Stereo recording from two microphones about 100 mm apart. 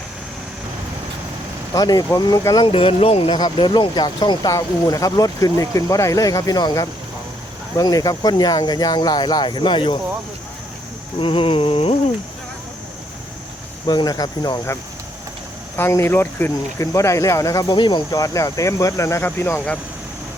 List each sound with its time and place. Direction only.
1.7 s speech: 40° left (ahead or behind)
2.6 s speech: 65° left (ahead or behind)
3.3 s speech: 45° left (ahead or behind)
11.2 s a sound: 65° left (ahead or behind)
13.8 s speech: 45° left (ahead or behind)
15.7 s speech: 25° left (ahead or behind)
17.7 s speech: 50° left (ahead or behind)
18.2 s speech: 35° left (ahead or behind)